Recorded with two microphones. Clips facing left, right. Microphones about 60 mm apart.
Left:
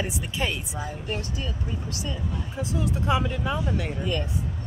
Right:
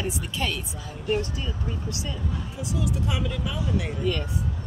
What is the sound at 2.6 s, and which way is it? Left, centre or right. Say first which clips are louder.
Speech: left 1 dB; left.